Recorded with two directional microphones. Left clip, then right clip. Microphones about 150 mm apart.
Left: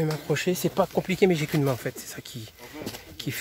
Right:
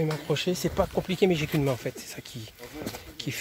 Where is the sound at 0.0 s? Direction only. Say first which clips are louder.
Left 1 dB; 25° left (ahead or behind).